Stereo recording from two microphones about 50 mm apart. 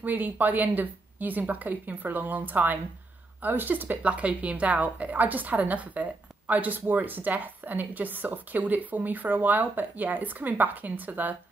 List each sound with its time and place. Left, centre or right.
0.0 s a woman's voice: right
4.0 s a woman's voice: right